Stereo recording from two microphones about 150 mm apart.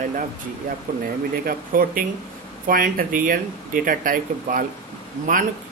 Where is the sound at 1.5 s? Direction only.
75° right (ahead or behind).